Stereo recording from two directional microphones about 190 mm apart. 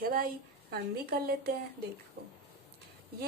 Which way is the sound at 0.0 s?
50° right (ahead or behind).